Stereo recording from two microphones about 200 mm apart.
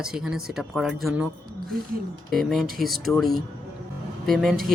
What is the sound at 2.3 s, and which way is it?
Speech, centre (ahead or behind).